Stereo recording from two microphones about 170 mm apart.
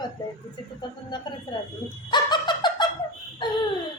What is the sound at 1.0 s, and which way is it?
Speech, 25° left (ahead or behind).